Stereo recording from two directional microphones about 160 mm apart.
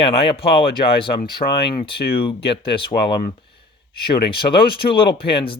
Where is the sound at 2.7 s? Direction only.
30° left (ahead or behind).